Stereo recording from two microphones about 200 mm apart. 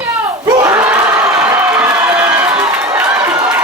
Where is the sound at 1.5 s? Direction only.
10° right (ahead or behind).